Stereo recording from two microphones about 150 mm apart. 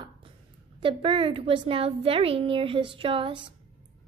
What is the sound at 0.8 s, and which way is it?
Speech, 35° right (ahead or behind).